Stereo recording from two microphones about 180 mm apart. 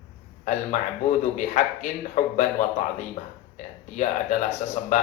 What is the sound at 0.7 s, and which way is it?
A man's voice, 40° left (ahead or behind).